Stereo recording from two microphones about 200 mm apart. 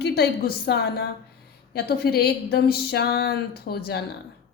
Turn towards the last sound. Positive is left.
turn(degrees=50)  # may be behind; listen again after turning